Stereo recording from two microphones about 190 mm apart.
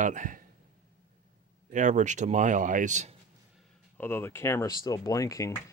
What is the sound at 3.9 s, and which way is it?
Speech, 10° left (ahead or behind).